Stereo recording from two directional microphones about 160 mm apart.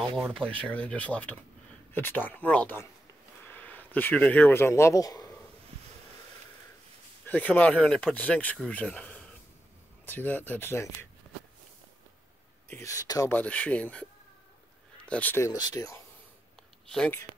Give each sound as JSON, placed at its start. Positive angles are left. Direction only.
{"t": 0.3, "sound": "speech", "side_deg": 5}
{"t": 7.2, "sound": "speech", "side_deg": 10}
{"t": 12.6, "sound": "speech", "side_deg": 15}
{"t": 13.3, "sound": "speech", "side_deg": 10}
{"t": 15.0, "sound": "speech", "side_deg": 10}
{"t": 15.5, "sound": "speech", "side_deg": 25}
{"t": 16.9, "sound": "speech", "side_deg": 5}